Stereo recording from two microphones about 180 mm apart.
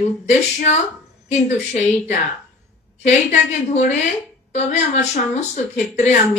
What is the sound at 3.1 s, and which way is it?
A woman's voice, 40° left (ahead or behind).